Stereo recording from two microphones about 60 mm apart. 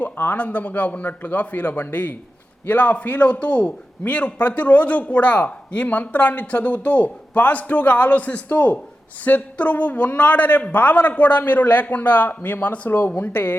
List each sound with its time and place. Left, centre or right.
0.0 s a man's voice: left